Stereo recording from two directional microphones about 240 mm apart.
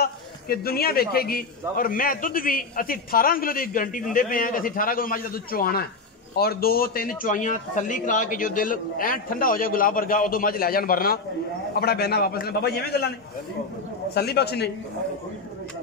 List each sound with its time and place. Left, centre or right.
0.0 s a man's voice: left
14.1 s a man's voice: left